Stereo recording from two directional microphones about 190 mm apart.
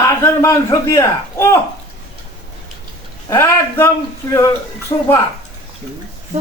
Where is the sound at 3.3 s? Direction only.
15° left (ahead or behind).